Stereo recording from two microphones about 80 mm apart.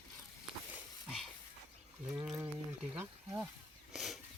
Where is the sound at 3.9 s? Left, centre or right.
Centre.